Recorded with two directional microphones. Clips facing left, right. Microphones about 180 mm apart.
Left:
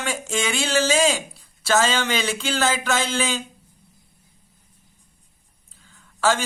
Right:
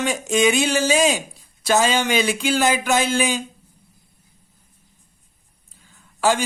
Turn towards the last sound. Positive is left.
turn(degrees=-15)  # may be behind; listen again after turning